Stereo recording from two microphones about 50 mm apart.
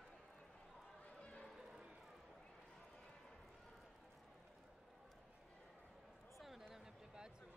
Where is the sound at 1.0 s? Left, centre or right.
Left.